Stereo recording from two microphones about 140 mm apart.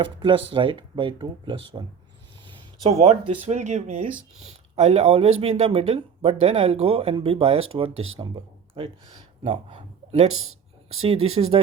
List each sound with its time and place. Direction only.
0.0 s speech: 35° right (ahead or behind)
2.9 s speech: 50° right (ahead or behind)